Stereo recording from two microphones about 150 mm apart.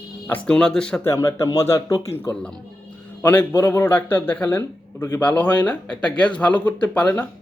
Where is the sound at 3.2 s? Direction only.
15° left (ahead or behind).